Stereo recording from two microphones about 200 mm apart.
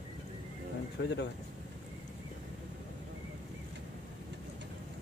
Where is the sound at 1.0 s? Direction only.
65° left (ahead or behind).